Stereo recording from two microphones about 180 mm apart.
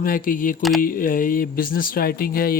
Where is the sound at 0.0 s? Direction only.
50° left (ahead or behind).